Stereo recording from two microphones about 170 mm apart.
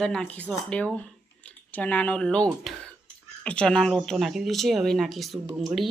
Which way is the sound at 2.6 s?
5° left (ahead or behind).